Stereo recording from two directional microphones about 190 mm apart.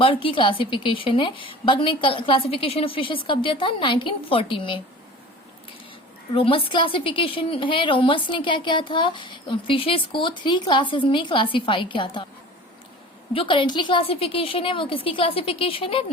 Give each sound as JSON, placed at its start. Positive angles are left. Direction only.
{"t": 0.0, "sound": "a woman's voice", "side_deg": 25}
{"t": 6.3, "sound": "a woman's voice", "side_deg": 30}
{"t": 13.3, "sound": "a woman's voice", "side_deg": 25}